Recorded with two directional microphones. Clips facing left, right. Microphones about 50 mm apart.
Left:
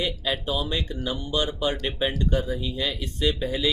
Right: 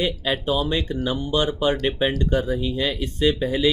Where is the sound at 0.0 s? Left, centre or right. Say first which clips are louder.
Right 4 dB; right.